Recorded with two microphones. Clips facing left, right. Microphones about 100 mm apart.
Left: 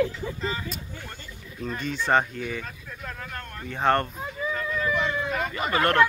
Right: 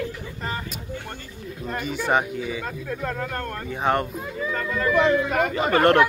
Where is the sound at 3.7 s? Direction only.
15° right (ahead or behind).